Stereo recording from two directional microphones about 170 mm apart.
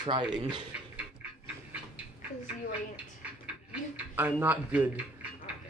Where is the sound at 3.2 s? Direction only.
10° right (ahead or behind).